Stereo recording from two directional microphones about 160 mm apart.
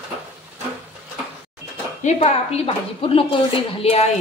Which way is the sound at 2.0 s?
40° left (ahead or behind).